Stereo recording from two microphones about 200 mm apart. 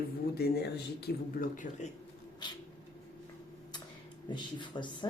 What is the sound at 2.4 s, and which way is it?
Speech, 20° left (ahead or behind).